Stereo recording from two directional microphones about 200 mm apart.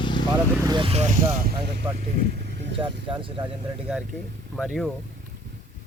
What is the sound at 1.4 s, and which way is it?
Speech, 50° right (ahead or behind).